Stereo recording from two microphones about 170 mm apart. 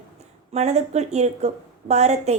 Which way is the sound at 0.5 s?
40° right (ahead or behind).